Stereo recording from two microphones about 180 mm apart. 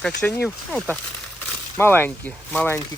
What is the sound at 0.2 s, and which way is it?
Speech, 5° left (ahead or behind).